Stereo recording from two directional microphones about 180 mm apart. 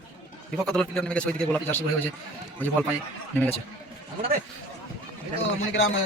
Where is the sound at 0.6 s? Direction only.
5° left (ahead or behind).